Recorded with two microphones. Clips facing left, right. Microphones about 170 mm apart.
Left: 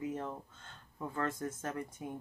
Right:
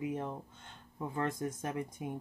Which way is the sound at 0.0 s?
15° right (ahead or behind).